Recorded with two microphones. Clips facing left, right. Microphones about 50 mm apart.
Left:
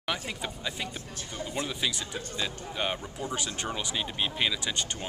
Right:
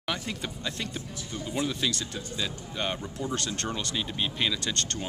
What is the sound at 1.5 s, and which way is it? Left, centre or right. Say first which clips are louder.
Speech: right 3 dB; centre.